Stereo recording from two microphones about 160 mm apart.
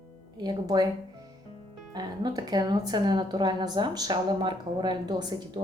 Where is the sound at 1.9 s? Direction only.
25° right (ahead or behind).